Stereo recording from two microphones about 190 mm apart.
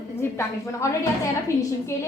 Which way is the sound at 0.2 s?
15° left (ahead or behind).